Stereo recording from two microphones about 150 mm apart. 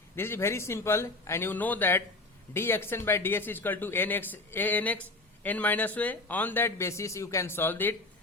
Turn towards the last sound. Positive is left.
turn(degrees=15)  # may be behind; listen again after turning